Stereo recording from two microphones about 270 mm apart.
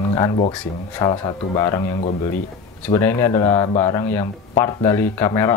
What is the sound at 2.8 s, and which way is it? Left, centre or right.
Speech, centre.